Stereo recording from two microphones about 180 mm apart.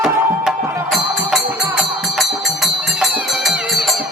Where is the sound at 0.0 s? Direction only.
Centre (ahead or behind).